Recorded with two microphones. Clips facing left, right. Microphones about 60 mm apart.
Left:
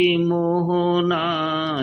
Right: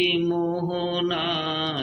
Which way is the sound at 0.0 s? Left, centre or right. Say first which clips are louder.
Left 4 dB; left.